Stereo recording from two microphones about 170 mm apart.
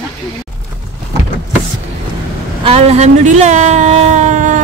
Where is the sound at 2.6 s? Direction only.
35° right (ahead or behind).